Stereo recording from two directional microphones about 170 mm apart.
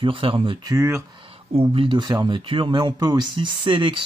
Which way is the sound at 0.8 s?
15° right (ahead or behind).